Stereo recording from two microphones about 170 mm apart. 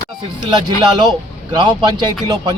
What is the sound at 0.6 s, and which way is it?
A man's voice, 25° right (ahead or behind).